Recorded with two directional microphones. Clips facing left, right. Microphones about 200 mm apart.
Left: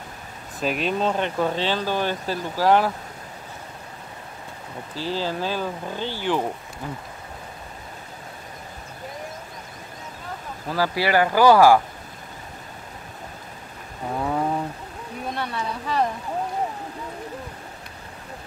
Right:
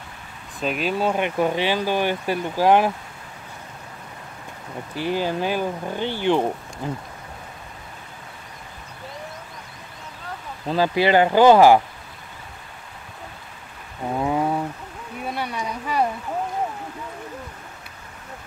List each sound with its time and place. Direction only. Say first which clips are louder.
0.6 s speech: even; centre (ahead or behind); by 2.9 s 15° right (ahead or behind)
4.9 s speech: right 3 dB; 15° right (ahead or behind)
10.7 s speech: right 4 dB; 20° right (ahead or behind)
14.2 s a sound: right 2 dB; 10° right (ahead or behind)